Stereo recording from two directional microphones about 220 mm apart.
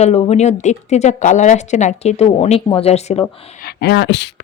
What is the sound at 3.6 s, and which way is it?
Speech, 50° left (ahead or behind).